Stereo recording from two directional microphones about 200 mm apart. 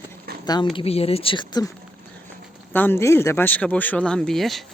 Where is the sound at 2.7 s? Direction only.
10° left (ahead or behind).